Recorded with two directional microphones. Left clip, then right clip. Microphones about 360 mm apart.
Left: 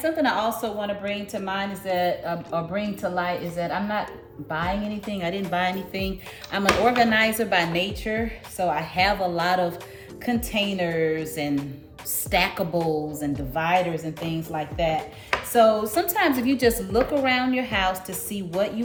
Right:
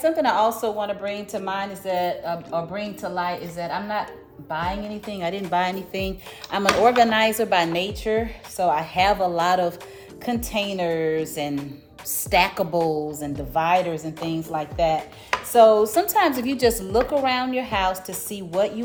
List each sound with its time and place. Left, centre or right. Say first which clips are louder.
0.0 s a woman's voice: right 4 dB; centre
15.3 s a woman's voice: right 4 dB; centre
18.5 s speech: right 3 dB; centre